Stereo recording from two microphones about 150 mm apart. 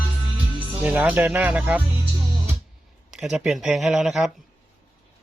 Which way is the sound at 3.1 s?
5° right (ahead or behind).